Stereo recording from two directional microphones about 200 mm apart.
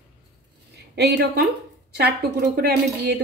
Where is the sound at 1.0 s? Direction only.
55° right (ahead or behind).